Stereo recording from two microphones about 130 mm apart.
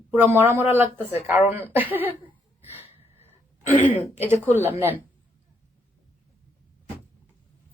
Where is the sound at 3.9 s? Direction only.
15° right (ahead or behind).